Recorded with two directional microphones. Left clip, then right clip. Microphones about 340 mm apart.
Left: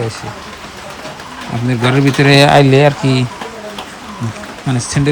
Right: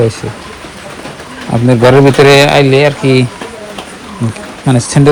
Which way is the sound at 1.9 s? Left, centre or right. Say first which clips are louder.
Right 6 dB; centre.